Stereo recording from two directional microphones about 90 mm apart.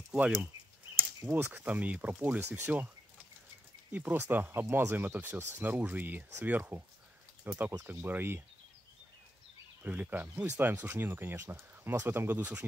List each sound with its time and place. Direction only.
0.1 s speech: 15° right (ahead or behind)
3.9 s speech: 20° right (ahead or behind)
9.8 s speech: 20° right (ahead or behind)